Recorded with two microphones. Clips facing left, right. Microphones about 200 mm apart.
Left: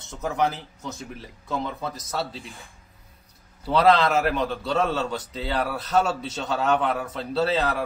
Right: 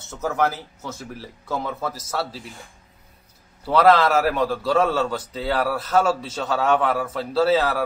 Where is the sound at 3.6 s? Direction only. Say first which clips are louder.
Right 3 dB; centre (ahead or behind).